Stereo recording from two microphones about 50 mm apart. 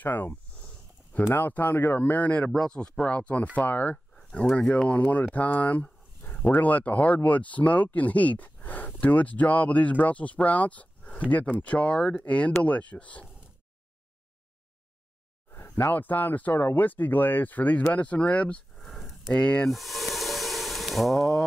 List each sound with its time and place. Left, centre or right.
0.0 s a sound: left
1.3 s speech: left
2.5 s speech: centre
3.1 s speech: left
3.9 s speech: centre
15.9 s speech: left
18.8 s a sound: centre
19.3 s speech: left
19.7 s a sound: centre